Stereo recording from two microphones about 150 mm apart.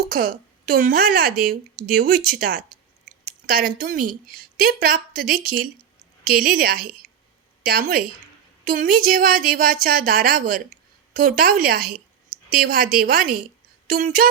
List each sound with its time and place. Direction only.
0.1 s a woman's voice: 70° right (ahead or behind)